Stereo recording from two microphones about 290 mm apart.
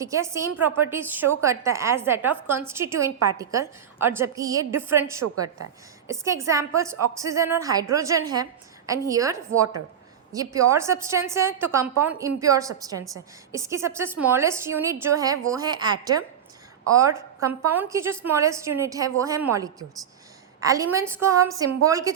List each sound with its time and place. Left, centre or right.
0.0 s a woman's voice: centre
5.2 s a woman's voice: right
6.1 s a woman's voice: centre